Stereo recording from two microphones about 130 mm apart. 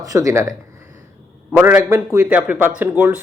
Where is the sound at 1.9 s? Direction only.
20° right (ahead or behind).